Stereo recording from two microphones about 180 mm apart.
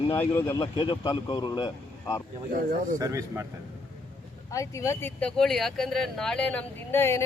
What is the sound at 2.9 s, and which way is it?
Speech, 15° right (ahead or behind).